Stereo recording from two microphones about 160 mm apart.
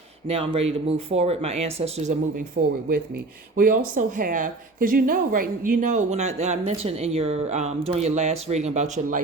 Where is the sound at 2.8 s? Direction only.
70° right (ahead or behind).